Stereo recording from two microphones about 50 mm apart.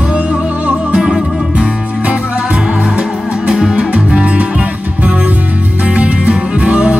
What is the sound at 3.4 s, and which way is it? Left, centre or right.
Music, centre.